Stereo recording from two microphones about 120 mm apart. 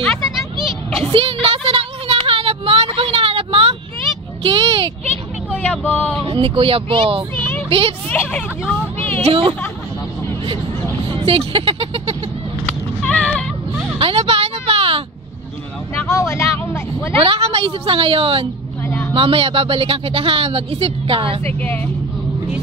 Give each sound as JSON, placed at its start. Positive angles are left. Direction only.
{"t": 1.1, "sound": "a sound", "side_deg": -50}
{"t": 5.6, "sound": "speech", "side_deg": 10}
{"t": 6.2, "sound": "speech", "side_deg": -45}
{"t": 8.1, "sound": "speech", "side_deg": 10}
{"t": 9.3, "sound": "speech", "side_deg": -50}
{"t": 11.1, "sound": "a sound", "side_deg": -50}
{"t": 13.0, "sound": "a sound", "side_deg": 10}
{"t": 13.9, "sound": "a sound", "side_deg": -50}
{"t": 15.9, "sound": "vehicle", "side_deg": 25}
{"t": 17.2, "sound": "speech", "side_deg": -50}
{"t": 18.9, "sound": "vehicle", "side_deg": 10}
{"t": 19.1, "sound": "speech", "side_deg": -50}
{"t": 21.5, "sound": "speech", "side_deg": 15}